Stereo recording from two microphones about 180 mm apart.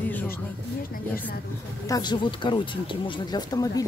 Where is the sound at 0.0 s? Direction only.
10° left (ahead or behind).